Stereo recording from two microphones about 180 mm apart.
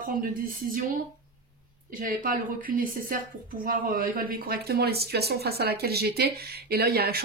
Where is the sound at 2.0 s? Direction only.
50° right (ahead or behind).